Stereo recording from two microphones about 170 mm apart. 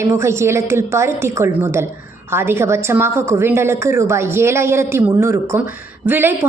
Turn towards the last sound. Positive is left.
turn(degrees=-15)  # may be behind; listen again after turning